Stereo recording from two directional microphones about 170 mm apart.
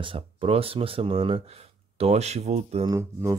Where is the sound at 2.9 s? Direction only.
20° right (ahead or behind).